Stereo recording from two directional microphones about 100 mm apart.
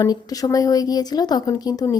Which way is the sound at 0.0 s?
40° left (ahead or behind).